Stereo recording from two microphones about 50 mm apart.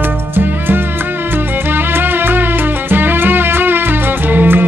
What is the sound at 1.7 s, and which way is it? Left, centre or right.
Music, right.